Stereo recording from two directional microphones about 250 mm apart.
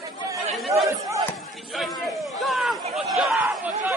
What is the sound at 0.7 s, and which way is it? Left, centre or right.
Chatter, centre.